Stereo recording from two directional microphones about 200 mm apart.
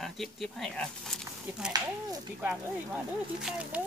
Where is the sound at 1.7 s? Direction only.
15° right (ahead or behind).